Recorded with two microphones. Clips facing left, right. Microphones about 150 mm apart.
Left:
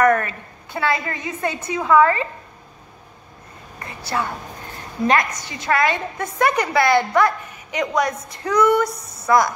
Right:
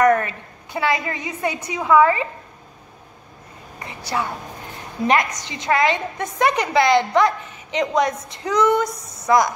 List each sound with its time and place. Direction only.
0.0 s a woman's voice: 20° right (ahead or behind)
3.8 s a woman's voice: 15° right (ahead or behind)